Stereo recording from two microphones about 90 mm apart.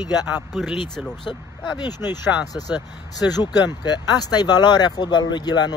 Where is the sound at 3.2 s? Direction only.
45° left (ahead or behind).